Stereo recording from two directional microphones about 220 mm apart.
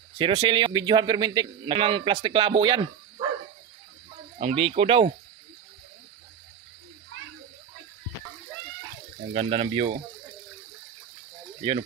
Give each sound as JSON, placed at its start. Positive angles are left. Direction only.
{"t": 0.2, "sound": "a man's voice", "side_deg": -25}
{"t": 4.4, "sound": "a man's voice", "side_deg": -25}
{"t": 9.3, "sound": "a man's voice", "side_deg": -25}